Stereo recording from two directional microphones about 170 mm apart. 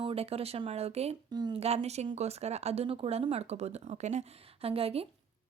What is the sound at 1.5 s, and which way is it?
Speech, 40° right (ahead or behind).